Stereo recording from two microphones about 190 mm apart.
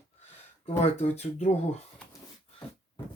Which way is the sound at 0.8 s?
35° left (ahead or behind).